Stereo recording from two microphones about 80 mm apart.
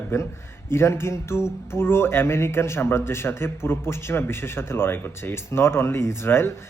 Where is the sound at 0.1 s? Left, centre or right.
Left.